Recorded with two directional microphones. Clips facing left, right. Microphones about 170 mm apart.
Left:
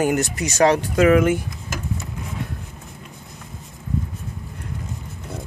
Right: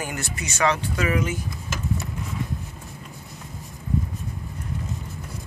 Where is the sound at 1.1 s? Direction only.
60° left (ahead or behind).